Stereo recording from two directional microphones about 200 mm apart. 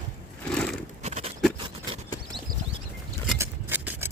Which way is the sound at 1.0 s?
35° right (ahead or behind).